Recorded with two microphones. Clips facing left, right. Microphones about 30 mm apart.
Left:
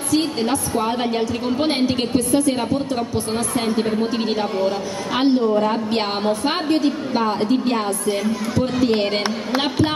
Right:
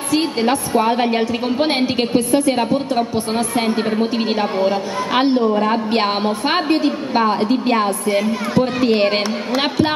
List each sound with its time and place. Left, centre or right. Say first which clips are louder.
0.1 s a woman's voice: right 3 dB; right